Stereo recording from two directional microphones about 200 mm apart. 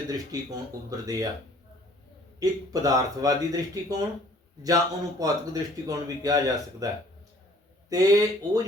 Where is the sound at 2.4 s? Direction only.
15° right (ahead or behind).